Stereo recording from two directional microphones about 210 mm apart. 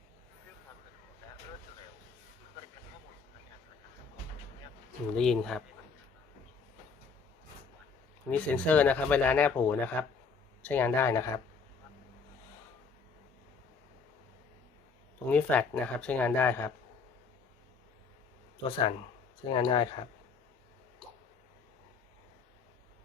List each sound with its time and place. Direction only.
5.1 s speech: centre (ahead or behind)
8.3 s speech: 5° left (ahead or behind)
15.3 s speech: 5° left (ahead or behind)
19.5 s speech: 25° left (ahead or behind)